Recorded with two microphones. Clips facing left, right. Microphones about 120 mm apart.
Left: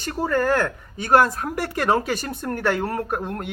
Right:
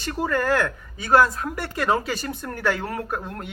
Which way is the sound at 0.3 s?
40° left (ahead or behind).